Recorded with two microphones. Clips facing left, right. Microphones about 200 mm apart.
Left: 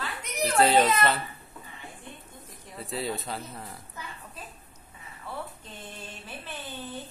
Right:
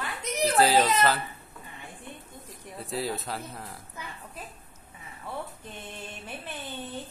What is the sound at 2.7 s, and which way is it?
A man's voice, centre (ahead or behind).